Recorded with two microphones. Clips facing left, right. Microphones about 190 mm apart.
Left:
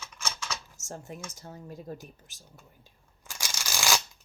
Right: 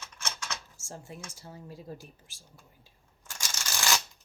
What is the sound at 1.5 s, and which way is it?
Speech, 45° left (ahead or behind).